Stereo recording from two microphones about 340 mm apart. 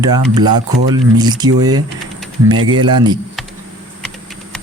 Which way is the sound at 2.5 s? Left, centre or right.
Right.